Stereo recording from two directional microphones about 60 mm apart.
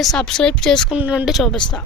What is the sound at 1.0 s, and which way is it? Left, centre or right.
Speech, right.